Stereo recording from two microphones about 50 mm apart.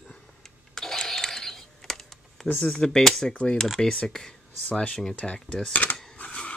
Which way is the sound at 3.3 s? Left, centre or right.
Left.